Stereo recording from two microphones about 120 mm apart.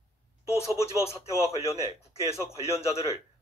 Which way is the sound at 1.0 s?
60° left (ahead or behind).